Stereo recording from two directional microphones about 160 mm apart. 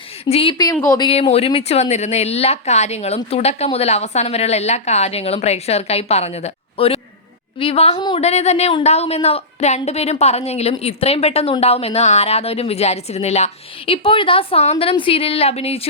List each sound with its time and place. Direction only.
0.3 s a woman's voice: 40° left (ahead or behind)
0.5 s speech: 25° left (ahead or behind)
1.0 s a woman's voice: 35° left (ahead or behind)
7.9 s speech: 25° left (ahead or behind)
8.2 s a woman's voice: 40° left (ahead or behind)